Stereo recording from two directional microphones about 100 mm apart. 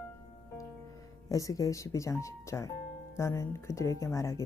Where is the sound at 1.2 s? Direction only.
35° left (ahead or behind).